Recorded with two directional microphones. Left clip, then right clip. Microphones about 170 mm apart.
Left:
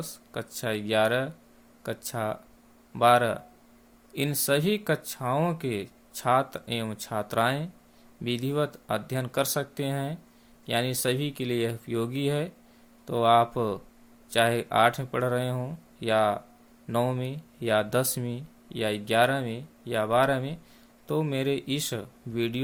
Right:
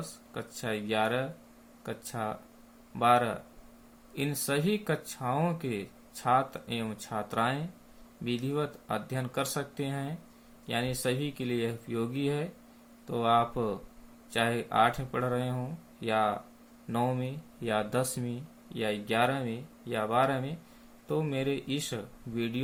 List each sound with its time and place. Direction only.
0.0 s speech: 65° left (ahead or behind)